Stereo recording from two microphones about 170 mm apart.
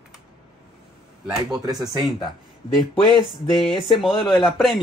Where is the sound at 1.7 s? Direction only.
20° right (ahead or behind).